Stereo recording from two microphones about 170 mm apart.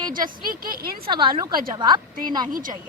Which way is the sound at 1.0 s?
30° right (ahead or behind).